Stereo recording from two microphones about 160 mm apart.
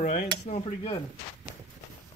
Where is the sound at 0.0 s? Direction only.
50° left (ahead or behind).